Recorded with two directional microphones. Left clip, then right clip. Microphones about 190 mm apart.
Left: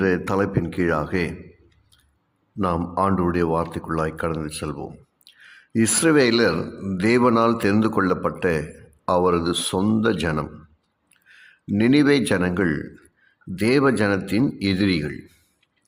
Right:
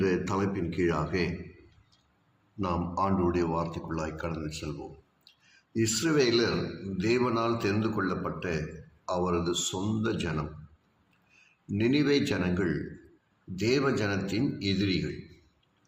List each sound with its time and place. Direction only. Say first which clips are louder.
0.0 s a man's voice: left 7 dB; 45° left (ahead or behind)
2.6 s a man's voice: left 8 dB; 45° left (ahead or behind)